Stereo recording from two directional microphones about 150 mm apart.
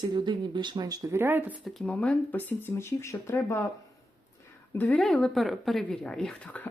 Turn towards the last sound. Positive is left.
turn(degrees=5)  # may be behind; listen again after turning